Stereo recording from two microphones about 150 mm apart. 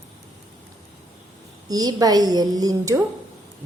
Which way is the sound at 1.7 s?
25° right (ahead or behind).